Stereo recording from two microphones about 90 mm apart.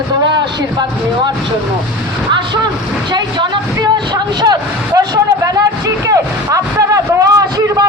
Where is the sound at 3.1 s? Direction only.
55° right (ahead or behind).